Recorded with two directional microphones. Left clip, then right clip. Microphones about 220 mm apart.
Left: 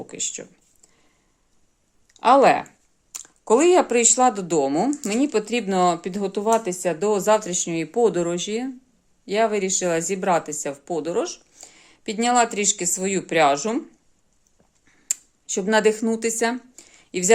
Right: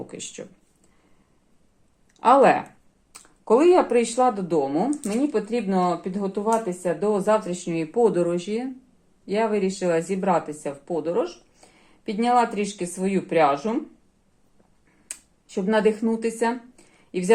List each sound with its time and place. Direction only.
0.1 s speech: 25° left (ahead or behind)
2.1 s speech: 30° left (ahead or behind)
15.0 s speech: 40° left (ahead or behind)